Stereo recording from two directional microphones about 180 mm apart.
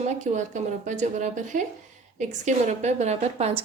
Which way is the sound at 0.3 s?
40° right (ahead or behind).